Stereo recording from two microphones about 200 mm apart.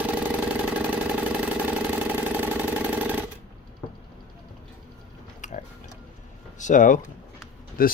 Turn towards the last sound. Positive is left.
turn(degrees=45)  # may be behind; listen again after turning